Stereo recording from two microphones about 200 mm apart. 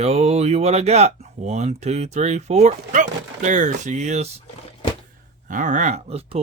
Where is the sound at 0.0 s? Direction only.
30° right (ahead or behind).